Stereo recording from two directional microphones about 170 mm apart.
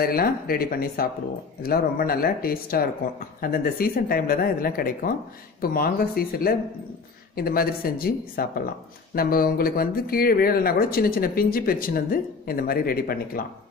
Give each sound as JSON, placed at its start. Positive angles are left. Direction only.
{"t": 0.0, "sound": "speech", "side_deg": 60}